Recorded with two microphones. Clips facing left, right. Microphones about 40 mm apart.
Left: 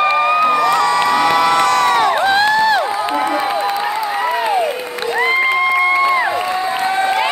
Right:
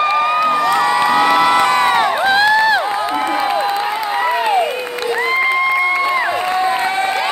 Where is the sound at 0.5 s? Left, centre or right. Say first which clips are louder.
Left 1 dB; centre.